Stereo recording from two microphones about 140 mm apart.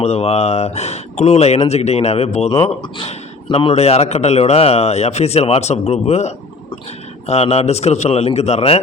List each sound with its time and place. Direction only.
0.0 s a man's voice: 50° left (ahead or behind)